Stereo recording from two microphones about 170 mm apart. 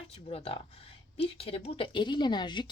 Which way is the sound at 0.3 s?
35° left (ahead or behind).